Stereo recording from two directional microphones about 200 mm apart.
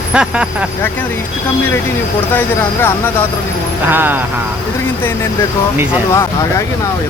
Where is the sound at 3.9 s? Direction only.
10° right (ahead or behind).